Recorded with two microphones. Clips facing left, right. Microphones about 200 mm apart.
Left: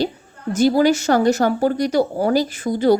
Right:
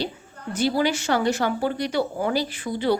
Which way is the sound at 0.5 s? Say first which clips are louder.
Left 7 dB; 45° left (ahead or behind).